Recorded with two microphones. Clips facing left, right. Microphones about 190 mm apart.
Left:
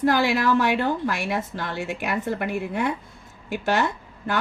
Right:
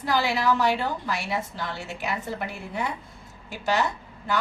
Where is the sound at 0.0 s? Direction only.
55° left (ahead or behind).